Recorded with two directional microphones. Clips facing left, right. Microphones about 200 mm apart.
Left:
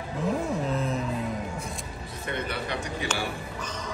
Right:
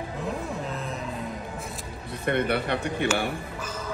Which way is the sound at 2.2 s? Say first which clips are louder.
Right 7 dB; 60° right (ahead or behind).